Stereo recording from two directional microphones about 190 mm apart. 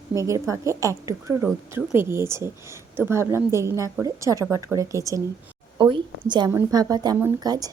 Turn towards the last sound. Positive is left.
turn(degrees=-20)  # may be behind; listen again after turning